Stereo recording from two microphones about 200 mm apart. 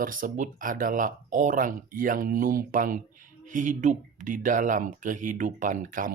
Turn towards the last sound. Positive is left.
turn(degrees=-40)  # may be behind; listen again after turning